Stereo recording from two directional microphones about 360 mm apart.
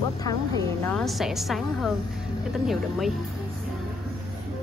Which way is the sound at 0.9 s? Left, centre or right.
Centre.